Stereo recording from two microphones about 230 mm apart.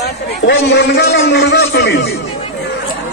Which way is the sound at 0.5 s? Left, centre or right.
Left.